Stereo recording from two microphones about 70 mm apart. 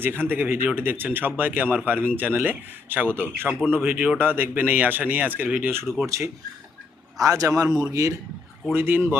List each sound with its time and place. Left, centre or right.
0.0 s speech: right
6.1 s a man's voice: right
8.7 s speech: right